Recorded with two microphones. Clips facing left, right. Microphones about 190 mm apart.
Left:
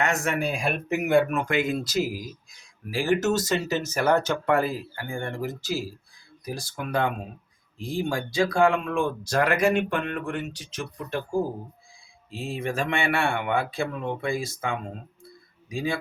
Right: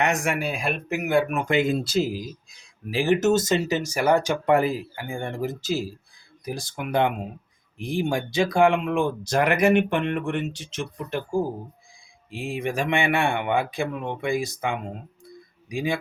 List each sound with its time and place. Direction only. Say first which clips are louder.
0.0 s speech: right 1 dB; 15° right (ahead or behind)
1.3 s speech: right 3 dB; 20° right (ahead or behind)
12.3 s speech: right 2 dB; 15° right (ahead or behind)